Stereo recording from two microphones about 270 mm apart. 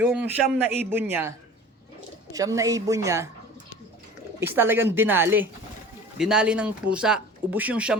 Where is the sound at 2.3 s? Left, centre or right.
Centre.